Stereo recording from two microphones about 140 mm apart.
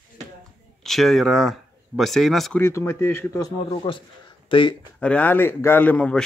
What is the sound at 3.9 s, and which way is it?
Speech, 30° left (ahead or behind).